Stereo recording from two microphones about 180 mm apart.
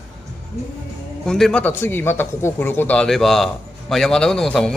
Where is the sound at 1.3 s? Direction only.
5° left (ahead or behind).